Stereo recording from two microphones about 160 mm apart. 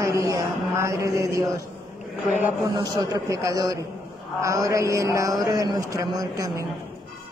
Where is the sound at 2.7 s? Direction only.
25° right (ahead or behind).